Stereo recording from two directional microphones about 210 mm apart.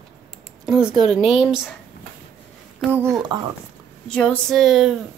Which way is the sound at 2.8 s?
10° right (ahead or behind).